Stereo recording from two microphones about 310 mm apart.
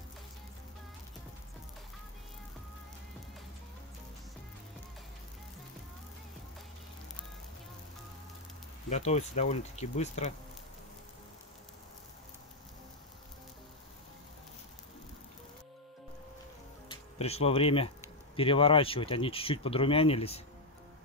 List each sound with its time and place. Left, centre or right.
8.8 s speech: left
16.9 s speech: centre